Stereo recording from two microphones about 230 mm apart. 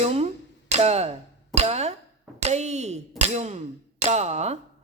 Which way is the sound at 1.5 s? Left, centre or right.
Right.